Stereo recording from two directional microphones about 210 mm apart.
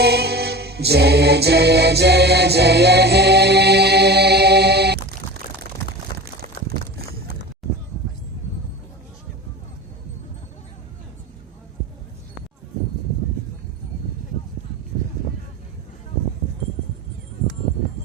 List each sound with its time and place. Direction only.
0.0 s music: 50° right (ahead or behind)